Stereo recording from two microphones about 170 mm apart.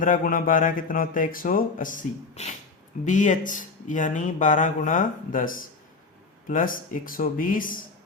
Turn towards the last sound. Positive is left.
turn(degrees=55)  # may be behind; listen again after turning